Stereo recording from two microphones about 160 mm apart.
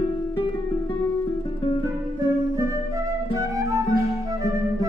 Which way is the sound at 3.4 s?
20° right (ahead or behind).